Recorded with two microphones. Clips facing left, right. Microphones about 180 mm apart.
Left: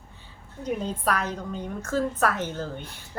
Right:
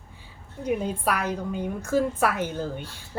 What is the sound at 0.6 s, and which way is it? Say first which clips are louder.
A woman's voice: right 2 dB; 10° right (ahead or behind).